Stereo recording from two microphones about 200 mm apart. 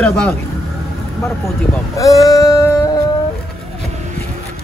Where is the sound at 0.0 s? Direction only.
5° left (ahead or behind).